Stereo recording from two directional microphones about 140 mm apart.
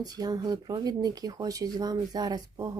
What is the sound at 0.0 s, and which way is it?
Speech, 25° right (ahead or behind).